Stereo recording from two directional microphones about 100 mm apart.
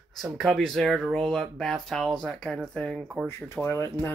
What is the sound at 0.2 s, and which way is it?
Speech, centre (ahead or behind).